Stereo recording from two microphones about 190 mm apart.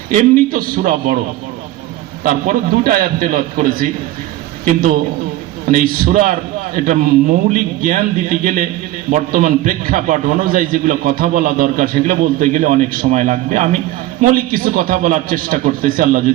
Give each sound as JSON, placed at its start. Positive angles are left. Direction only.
{"t": 0.1, "sound": "a man's voice", "side_deg": -45}
{"t": 2.2, "sound": "a man's voice", "side_deg": -45}
{"t": 5.6, "sound": "a man's voice", "side_deg": -50}